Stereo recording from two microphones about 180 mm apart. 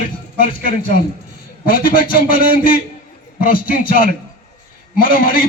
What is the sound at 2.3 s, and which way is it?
A man's voice, 50° left (ahead or behind).